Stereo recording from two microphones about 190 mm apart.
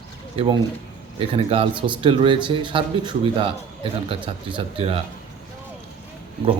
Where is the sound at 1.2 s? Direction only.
30° right (ahead or behind).